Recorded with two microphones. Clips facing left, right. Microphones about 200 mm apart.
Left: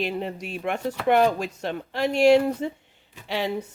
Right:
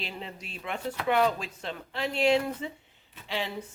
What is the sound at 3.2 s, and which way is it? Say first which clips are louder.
Speech: left 6 dB; 70° left (ahead or behind).